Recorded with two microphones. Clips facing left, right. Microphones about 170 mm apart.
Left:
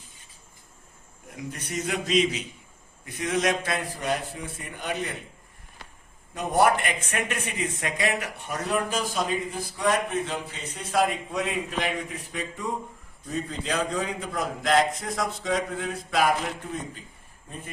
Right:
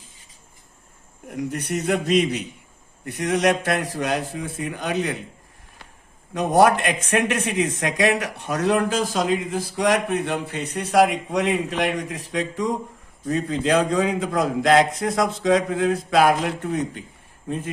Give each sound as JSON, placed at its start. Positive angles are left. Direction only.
{"t": 1.5, "sound": "a man's voice", "side_deg": -65}
{"t": 6.3, "sound": "a man's voice", "side_deg": -90}